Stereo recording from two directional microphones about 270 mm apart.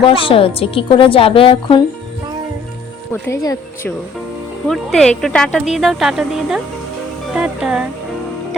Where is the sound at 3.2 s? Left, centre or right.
Centre.